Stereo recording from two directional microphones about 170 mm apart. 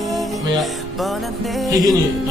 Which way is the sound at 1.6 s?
20° right (ahead or behind).